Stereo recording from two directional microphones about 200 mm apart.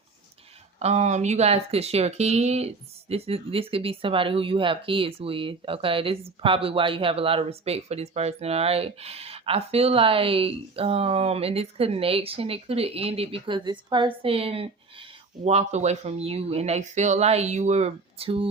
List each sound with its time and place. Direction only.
0.8 s speech: 35° right (ahead or behind)